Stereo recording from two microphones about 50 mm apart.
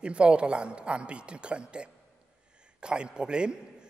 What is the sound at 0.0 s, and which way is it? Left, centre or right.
A man's voice, right.